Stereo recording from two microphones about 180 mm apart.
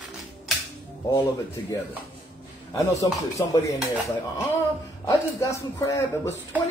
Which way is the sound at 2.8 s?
20° left (ahead or behind).